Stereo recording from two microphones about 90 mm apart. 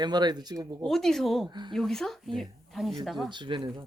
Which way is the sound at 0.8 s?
5° left (ahead or behind).